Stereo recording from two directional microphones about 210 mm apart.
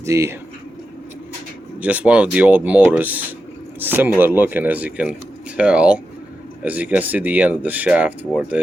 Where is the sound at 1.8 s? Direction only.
5° right (ahead or behind).